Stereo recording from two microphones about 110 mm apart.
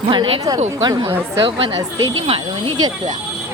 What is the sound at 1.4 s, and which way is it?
Speech, 55° right (ahead or behind).